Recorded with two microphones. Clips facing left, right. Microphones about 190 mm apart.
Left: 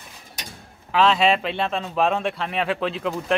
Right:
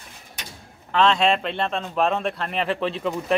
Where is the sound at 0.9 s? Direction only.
5° left (ahead or behind).